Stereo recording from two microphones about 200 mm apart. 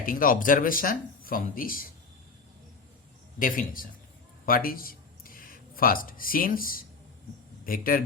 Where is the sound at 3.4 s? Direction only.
45° left (ahead or behind).